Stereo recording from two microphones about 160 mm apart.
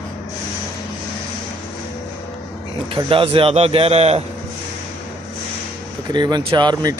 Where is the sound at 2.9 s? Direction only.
35° right (ahead or behind).